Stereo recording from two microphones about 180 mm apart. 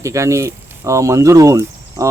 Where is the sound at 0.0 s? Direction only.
15° right (ahead or behind).